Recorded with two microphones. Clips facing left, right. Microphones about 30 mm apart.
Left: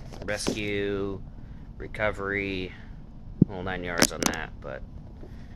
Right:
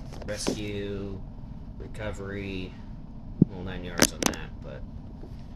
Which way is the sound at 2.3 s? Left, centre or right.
Left.